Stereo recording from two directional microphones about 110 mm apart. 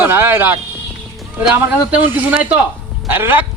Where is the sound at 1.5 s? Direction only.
15° right (ahead or behind).